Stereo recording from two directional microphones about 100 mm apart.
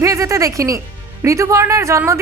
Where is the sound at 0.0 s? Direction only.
30° right (ahead or behind).